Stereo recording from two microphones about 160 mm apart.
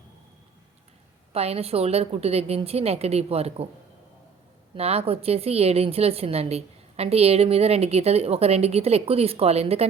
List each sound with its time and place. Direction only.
1.3 s a woman's voice: 40° right (ahead or behind)
4.7 s a woman's voice: 40° right (ahead or behind)